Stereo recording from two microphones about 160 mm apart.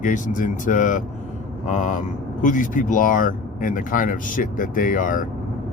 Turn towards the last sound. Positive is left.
turn(degrees=55)  # may be behind; listen again after turning